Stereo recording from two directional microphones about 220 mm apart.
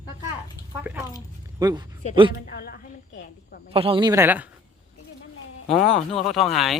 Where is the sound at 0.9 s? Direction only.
5° right (ahead or behind).